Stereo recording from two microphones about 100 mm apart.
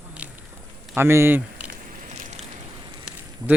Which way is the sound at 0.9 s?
25° right (ahead or behind).